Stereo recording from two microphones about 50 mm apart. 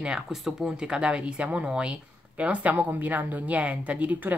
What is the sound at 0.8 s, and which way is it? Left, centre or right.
Speech, centre.